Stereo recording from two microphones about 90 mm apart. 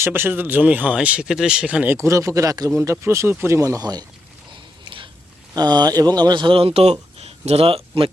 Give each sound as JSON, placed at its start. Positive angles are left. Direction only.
{"t": 0.0, "sound": "speech", "side_deg": -25}
{"t": 1.9, "sound": "speech", "side_deg": -35}
{"t": 3.6, "sound": "speech", "side_deg": -45}
{"t": 5.5, "sound": "speech", "side_deg": -50}